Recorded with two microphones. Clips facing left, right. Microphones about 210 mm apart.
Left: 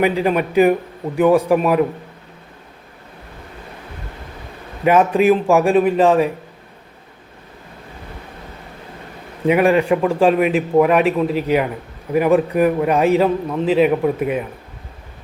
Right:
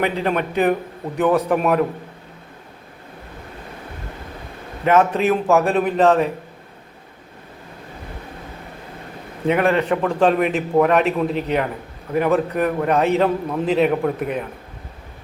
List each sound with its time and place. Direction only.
0.0 s a man's voice: 10° left (ahead or behind)
4.9 s a man's voice: 10° left (ahead or behind)
9.5 s a man's voice: 10° left (ahead or behind)